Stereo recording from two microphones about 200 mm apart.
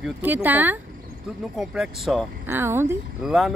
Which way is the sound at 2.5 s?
10° right (ahead or behind).